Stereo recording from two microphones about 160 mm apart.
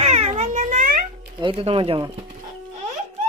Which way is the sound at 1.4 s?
35° right (ahead or behind).